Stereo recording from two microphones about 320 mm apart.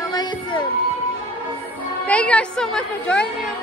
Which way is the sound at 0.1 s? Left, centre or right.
Centre.